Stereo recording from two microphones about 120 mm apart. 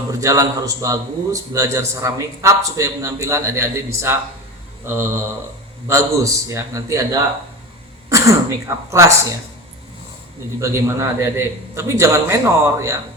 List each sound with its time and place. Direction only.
0.1 s speech: 25° right (ahead or behind)
4.9 s speech: 20° right (ahead or behind)
10.6 s speech: 25° right (ahead or behind)